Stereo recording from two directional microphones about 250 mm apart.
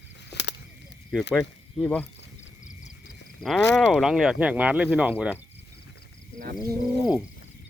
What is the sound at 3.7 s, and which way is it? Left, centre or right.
Speech, centre.